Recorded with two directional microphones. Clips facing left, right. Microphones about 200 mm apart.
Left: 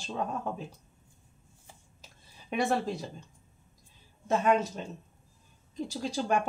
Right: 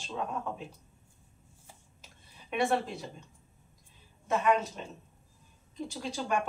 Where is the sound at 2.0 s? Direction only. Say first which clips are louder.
Even; 35° left (ahead or behind).